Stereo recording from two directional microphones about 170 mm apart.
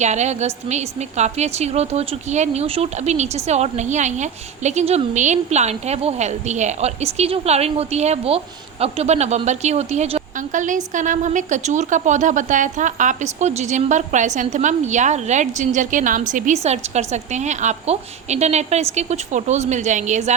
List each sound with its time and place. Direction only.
0.0 s a woman's voice: 40° right (ahead or behind)